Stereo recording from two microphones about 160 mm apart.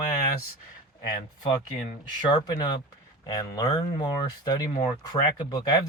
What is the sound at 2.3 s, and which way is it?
Speech, 25° left (ahead or behind).